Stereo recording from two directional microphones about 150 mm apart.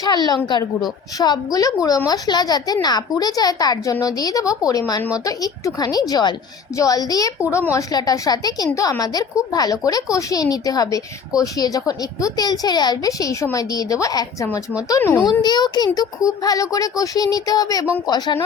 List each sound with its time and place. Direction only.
0.0 s a woman's voice: 25° left (ahead or behind)